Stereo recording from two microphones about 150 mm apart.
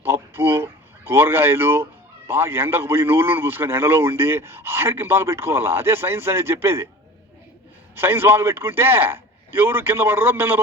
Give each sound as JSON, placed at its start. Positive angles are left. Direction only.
{"t": 0.0, "sound": "speech", "side_deg": -15}
{"t": 7.9, "sound": "a man's voice", "side_deg": -15}